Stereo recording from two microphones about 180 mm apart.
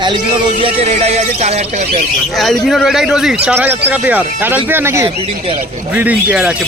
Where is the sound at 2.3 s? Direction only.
Centre (ahead or behind).